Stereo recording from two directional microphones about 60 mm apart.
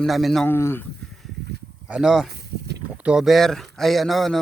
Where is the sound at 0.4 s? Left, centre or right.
Left.